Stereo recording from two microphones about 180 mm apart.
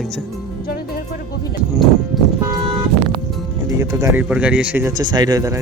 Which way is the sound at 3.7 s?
15° right (ahead or behind).